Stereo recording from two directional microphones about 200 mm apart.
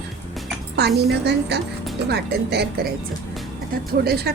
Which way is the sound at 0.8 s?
55° right (ahead or behind).